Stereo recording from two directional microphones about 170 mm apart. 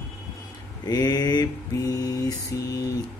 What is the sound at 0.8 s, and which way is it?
Mantra, 25° left (ahead or behind).